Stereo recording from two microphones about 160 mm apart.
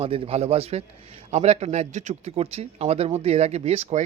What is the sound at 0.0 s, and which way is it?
A man's voice, 35° right (ahead or behind).